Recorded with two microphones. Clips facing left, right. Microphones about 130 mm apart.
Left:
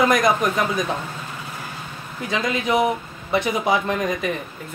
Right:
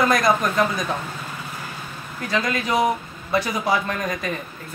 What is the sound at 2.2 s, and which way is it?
Speech, 20° left (ahead or behind).